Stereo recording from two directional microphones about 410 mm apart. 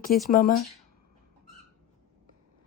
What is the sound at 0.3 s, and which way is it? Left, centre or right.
Speech, left.